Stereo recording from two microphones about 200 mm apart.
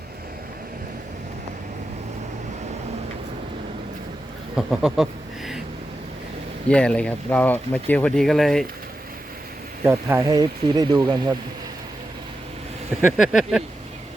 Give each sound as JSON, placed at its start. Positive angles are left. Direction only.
{"t": 4.5, "sound": "speech", "side_deg": -5}
{"t": 6.7, "sound": "speech", "side_deg": 5}
{"t": 9.8, "sound": "speech", "side_deg": -10}
{"t": 13.1, "sound": "speech", "side_deg": 0}